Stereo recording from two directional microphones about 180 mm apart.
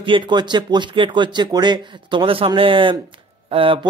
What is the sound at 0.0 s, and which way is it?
A man's voice, 25° right (ahead or behind).